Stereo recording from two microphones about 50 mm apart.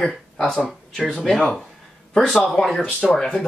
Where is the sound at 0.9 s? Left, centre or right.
Centre.